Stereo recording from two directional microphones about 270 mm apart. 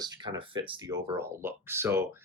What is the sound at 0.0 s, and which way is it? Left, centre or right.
Speech, centre.